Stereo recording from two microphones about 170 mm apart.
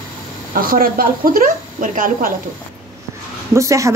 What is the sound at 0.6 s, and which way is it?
A woman's voice, 55° right (ahead or behind).